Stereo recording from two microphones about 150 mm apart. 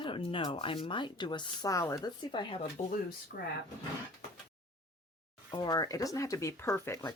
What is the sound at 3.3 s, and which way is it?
Speech, 90° left.